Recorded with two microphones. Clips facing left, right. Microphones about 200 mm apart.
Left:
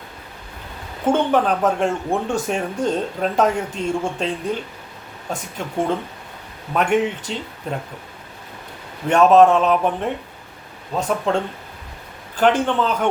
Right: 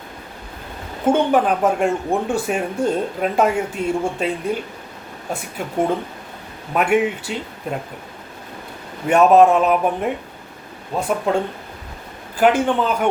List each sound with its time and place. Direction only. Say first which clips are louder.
1.0 s speech: right 1 dB; 10° right (ahead or behind)
9.0 s speech: even; 10° right (ahead or behind)